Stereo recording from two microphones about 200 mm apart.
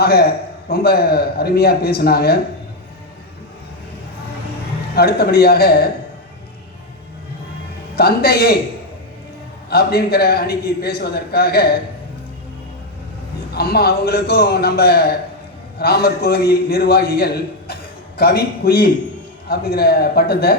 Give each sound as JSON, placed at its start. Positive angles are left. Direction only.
{"t": 0.0, "sound": "a man's voice", "side_deg": 50}
{"t": 4.9, "sound": "a man's voice", "side_deg": 50}
{"t": 7.9, "sound": "a man's voice", "side_deg": 50}
{"t": 9.6, "sound": "a man's voice", "side_deg": 50}
{"t": 13.5, "sound": "a man's voice", "side_deg": 50}